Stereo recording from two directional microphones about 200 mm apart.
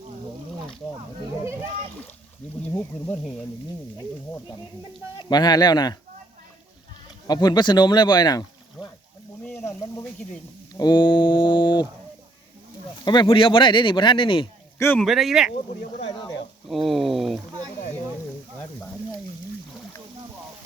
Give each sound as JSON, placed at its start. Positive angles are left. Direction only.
{"t": 5.2, "sound": "speech", "side_deg": 20}
{"t": 7.3, "sound": "speech", "side_deg": 20}
{"t": 13.1, "sound": "speech", "side_deg": 25}
{"t": 14.8, "sound": "speech", "side_deg": 5}
{"t": 16.6, "sound": "speech", "side_deg": 0}